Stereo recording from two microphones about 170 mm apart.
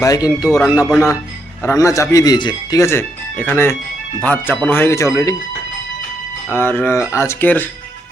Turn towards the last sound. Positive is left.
turn(degrees=10)  # may be behind; listen again after turning